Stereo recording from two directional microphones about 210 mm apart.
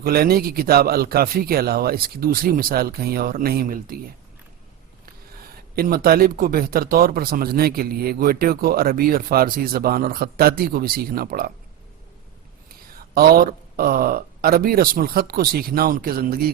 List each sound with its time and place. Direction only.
0.0 s a man's voice: 45° right (ahead or behind)
5.7 s a man's voice: 45° right (ahead or behind)
13.1 s a man's voice: 45° right (ahead or behind)